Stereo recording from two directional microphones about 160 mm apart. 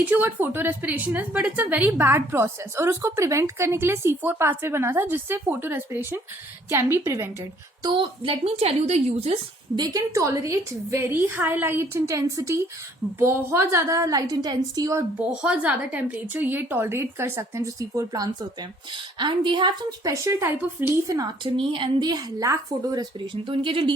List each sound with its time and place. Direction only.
0.0 s a woman's voice: 10° right (ahead or behind)
7.8 s a woman's voice: 30° right (ahead or behind)
9.7 s a woman's voice: 25° right (ahead or behind)
15.4 s a woman's voice: 5° right (ahead or behind)
21.5 s a woman's voice: 30° right (ahead or behind)